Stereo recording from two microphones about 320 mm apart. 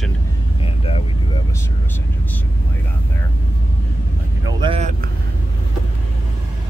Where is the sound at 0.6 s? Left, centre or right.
Centre.